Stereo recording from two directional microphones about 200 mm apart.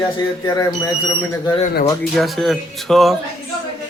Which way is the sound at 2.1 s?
Centre (ahead or behind).